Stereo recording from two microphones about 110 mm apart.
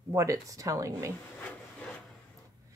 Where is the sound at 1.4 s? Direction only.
10° left (ahead or behind).